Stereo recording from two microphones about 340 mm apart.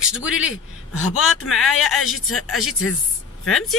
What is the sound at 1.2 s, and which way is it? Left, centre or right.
Speech, left.